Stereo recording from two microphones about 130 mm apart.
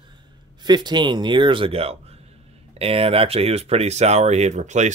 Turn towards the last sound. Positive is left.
turn(degrees=-65)  # may be behind; listen again after turning